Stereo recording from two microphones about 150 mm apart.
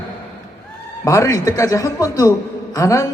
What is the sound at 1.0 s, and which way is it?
A man's voice, 20° left (ahead or behind).